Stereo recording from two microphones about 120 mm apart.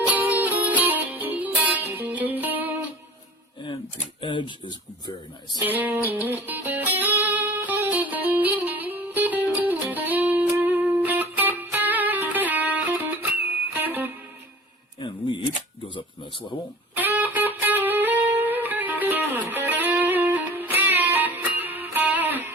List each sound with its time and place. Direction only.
0.1 s music: 15° right (ahead or behind)
4.2 s speech: 45° left (ahead or behind)
5.6 s music: 15° right (ahead or behind)
15.0 s camera: 40° left (ahead or behind)
17.0 s music: 15° right (ahead or behind)